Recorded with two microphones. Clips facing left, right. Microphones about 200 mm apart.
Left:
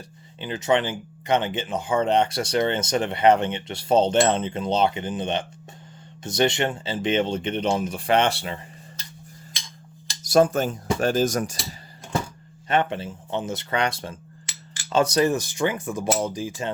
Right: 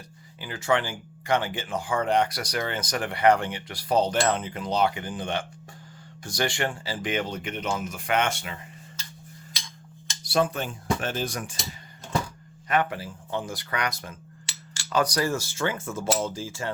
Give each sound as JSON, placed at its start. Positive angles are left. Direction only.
{"t": 0.3, "sound": "speech", "side_deg": 20}
{"t": 10.1, "sound": "cutlery", "side_deg": 45}
{"t": 12.6, "sound": "speech", "side_deg": 25}